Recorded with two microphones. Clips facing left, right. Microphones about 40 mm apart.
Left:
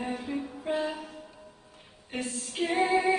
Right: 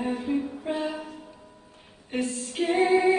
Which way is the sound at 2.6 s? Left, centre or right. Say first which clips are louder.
Right 4 dB; right.